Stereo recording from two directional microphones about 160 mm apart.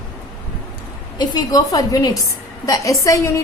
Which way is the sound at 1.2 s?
25° left (ahead or behind).